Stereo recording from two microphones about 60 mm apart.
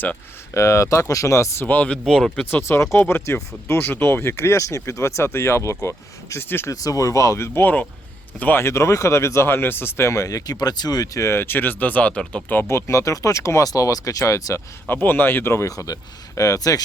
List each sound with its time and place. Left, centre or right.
0.5 s speech: left
1.6 s speech: left
2.0 s speech: centre
2.5 s speech: left
6.7 s speech: left
7.6 s speech: left
8.6 s speech: left
10.1 s speech: left
11.3 s speech: left; by 12.2 s centre
12.6 s speech: left
14.8 s speech: left
15.5 s speech: left